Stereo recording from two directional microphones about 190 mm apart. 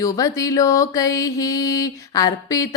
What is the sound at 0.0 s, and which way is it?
Music, 15° left (ahead or behind).